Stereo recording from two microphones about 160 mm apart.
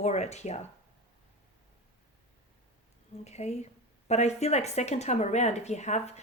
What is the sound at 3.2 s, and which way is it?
A woman's voice, 45° left (ahead or behind).